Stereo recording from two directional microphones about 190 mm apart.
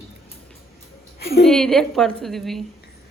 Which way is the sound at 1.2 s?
55° left (ahead or behind).